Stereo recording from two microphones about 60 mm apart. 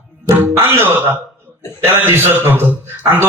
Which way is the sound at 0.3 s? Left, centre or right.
Right.